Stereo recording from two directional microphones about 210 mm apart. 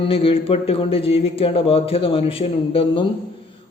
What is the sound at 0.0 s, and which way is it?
Speech, 25° left (ahead or behind).